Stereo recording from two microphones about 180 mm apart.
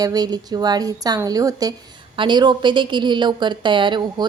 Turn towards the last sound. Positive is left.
turn(degrees=-25)  # may be behind; listen again after turning